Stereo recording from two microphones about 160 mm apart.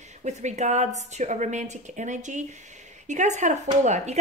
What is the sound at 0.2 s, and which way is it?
A woman's voice, 45° right (ahead or behind).